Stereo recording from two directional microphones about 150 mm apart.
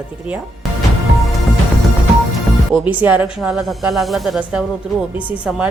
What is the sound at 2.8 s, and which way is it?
A woman's voice, 10° right (ahead or behind).